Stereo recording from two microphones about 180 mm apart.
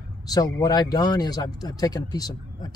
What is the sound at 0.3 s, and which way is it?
Speech, 20° left (ahead or behind).